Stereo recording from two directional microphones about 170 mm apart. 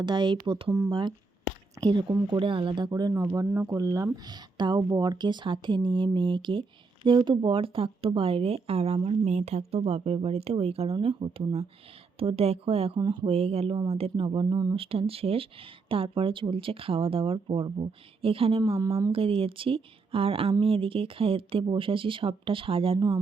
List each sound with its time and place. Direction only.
0.0 s speech: 25° right (ahead or behind)